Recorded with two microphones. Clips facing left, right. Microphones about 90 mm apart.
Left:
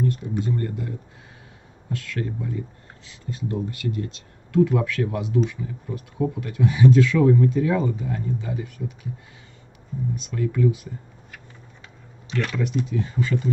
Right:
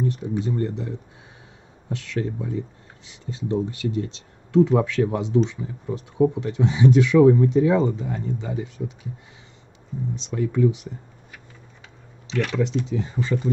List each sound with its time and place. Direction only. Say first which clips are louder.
0.0 s speech: even; 20° right (ahead or behind)
10.1 s speech: right 3 dB; 25° right (ahead or behind)
12.8 s speech: left 1 dB; 25° right (ahead or behind)